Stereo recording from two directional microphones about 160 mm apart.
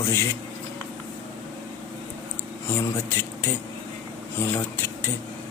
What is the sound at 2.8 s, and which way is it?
A man's voice, 15° left (ahead or behind).